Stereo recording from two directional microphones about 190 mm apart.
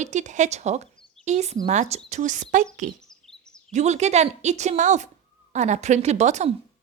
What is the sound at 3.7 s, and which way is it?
A woman's voice, 35° right (ahead or behind).